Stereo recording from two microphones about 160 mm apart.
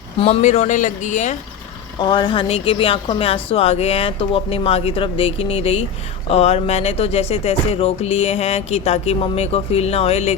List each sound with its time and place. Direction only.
0.2 s speech: 45° left (ahead or behind)
2.0 s speech: 30° left (ahead or behind)